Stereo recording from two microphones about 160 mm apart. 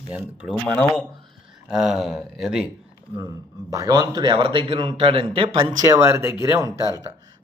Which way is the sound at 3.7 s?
20° right (ahead or behind).